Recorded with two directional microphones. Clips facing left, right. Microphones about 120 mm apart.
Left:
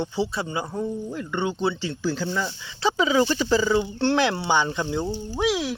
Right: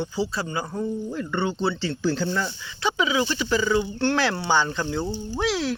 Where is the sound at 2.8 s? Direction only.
35° left (ahead or behind).